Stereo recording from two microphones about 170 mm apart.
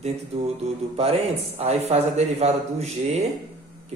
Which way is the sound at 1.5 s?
40° right (ahead or behind).